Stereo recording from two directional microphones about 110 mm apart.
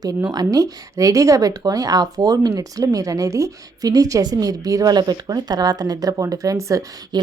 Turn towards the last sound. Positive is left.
turn(degrees=-30)  # may be behind; listen again after turning